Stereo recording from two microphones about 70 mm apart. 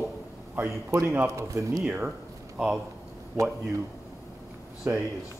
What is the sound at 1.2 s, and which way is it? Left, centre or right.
Speech, right.